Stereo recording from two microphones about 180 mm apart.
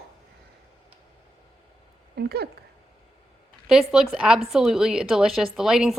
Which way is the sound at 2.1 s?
65° right (ahead or behind).